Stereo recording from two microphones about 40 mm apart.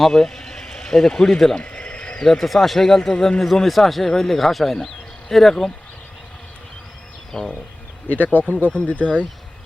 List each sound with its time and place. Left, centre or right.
0.0 s a sound: centre
1.1 s speech: centre
1.6 s a sound: left
2.1 s speech: centre
3.4 s a man's voice: centre
7.3 s speech: centre
8.0 s speech: left
8.7 s speech: left